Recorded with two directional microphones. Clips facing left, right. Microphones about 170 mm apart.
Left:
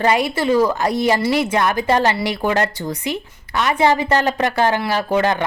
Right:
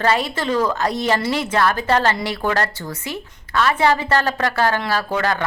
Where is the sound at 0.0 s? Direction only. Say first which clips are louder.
Left 3 dB; 15° left (ahead or behind).